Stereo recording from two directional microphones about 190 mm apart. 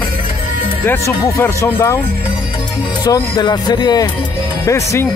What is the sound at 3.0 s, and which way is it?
Speech, 20° left (ahead or behind).